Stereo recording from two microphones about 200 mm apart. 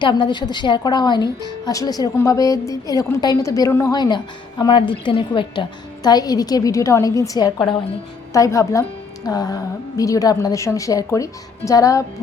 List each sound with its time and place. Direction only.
0.0 s a woman's voice: 25° left (ahead or behind)